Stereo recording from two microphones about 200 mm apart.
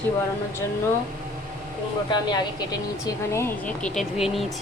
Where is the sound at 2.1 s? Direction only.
20° left (ahead or behind).